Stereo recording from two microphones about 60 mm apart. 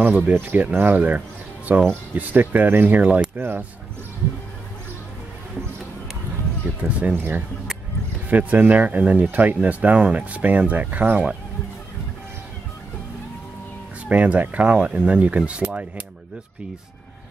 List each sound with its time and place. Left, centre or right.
0.1 s speech: right
6.8 s speech: right
7.2 s speech: right
14.0 s speech: right